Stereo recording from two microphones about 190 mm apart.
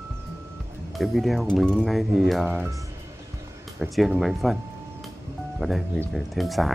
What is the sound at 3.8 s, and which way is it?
Speech, centre (ahead or behind).